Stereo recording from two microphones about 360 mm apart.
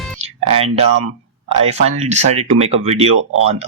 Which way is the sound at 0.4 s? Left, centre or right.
Centre.